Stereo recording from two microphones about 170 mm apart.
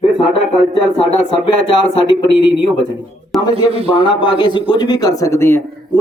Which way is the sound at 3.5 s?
35° right (ahead or behind).